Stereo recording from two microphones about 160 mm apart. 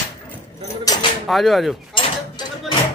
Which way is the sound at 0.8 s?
20° left (ahead or behind).